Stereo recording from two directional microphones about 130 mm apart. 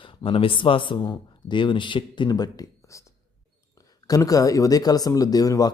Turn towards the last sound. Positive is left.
turn(degrees=30)  # may be behind; listen again after turning